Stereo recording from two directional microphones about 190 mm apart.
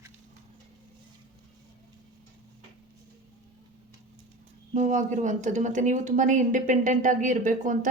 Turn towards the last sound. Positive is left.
turn(degrees=-40)  # may be behind; listen again after turning